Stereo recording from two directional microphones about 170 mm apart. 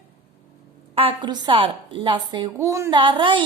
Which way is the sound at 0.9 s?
30° right (ahead or behind).